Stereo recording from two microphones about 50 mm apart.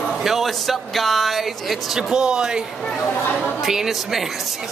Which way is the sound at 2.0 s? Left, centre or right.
Centre.